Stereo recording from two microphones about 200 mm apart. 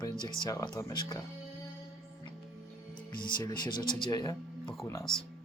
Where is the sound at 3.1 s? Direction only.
25° left (ahead or behind).